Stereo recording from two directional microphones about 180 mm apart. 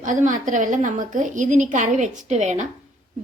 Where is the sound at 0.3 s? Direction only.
45° right (ahead or behind).